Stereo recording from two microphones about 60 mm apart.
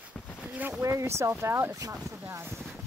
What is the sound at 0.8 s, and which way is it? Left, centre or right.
Speech, right.